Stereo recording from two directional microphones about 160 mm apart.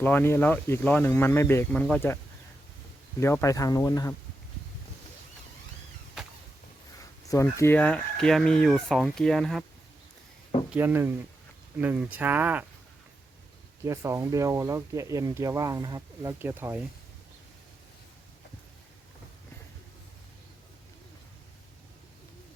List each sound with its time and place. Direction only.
0.0 s speech: 10° left (ahead or behind)
3.2 s speech: 15° left (ahead or behind)
6.2 s a sound: 5° right (ahead or behind)
7.3 s speech: 20° left (ahead or behind); by 9.6 s centre (ahead or behind)
10.7 s speech: 10° right (ahead or behind)
13.8 s speech: 20° right (ahead or behind)